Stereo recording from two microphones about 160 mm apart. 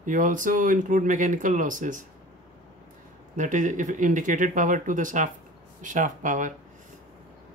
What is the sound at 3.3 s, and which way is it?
Speech, 50° right (ahead or behind).